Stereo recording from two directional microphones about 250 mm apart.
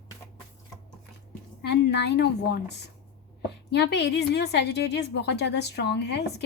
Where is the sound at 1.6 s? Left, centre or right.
Left.